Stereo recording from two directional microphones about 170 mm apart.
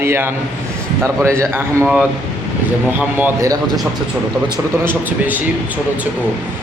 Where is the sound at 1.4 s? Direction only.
15° right (ahead or behind).